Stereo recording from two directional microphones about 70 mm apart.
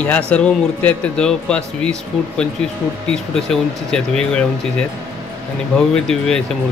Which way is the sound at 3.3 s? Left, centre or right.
Centre.